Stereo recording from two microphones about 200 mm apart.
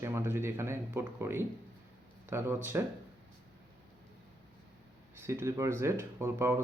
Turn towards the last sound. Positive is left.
turn(degrees=-10)  # may be behind; listen again after turning